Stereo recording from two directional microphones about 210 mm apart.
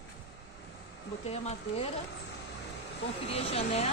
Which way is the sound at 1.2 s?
30° left (ahead or behind).